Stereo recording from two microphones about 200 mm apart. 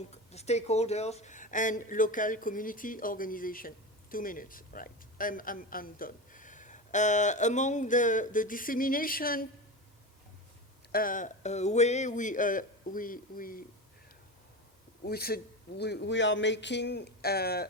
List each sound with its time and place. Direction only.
0.1 s a man's voice: 35° left (ahead or behind)
10.9 s speech: 40° left (ahead or behind)
15.0 s a man's voice: 50° left (ahead or behind)